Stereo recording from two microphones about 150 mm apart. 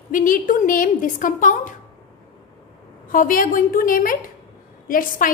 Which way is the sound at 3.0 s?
65° left (ahead or behind).